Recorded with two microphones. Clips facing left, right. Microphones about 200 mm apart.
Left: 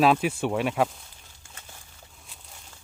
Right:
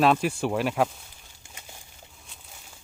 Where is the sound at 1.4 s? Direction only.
15° right (ahead or behind).